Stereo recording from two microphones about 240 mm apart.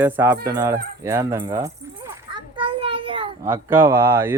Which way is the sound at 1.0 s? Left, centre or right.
Centre.